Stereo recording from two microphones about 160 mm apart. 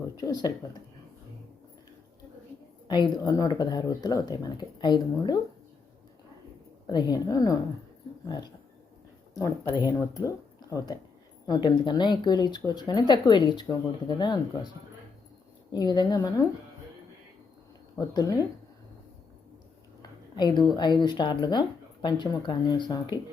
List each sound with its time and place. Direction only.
0.2 s speech: 25° left (ahead or behind)
2.8 s speech: 30° left (ahead or behind)
6.8 s speech: 25° left (ahead or behind)
9.3 s speech: 20° left (ahead or behind)
15.7 s speech: 25° left (ahead or behind)
17.9 s speech: 25° left (ahead or behind)
20.0 s a sound: 25° left (ahead or behind)
20.7 s speech: 30° left (ahead or behind)